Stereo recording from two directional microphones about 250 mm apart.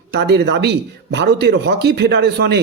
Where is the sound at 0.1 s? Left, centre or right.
Right.